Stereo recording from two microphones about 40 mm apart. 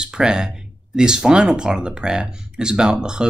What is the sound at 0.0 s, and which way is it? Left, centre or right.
Speech, right.